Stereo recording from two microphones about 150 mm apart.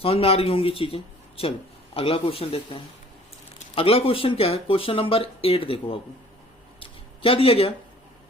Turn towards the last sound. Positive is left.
turn(degrees=40)  # may be behind; listen again after turning